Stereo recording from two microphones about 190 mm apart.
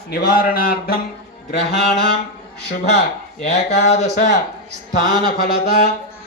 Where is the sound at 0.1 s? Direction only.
50° left (ahead or behind).